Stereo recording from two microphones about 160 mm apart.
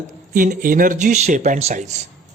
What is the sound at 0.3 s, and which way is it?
A man's voice, 60° right (ahead or behind).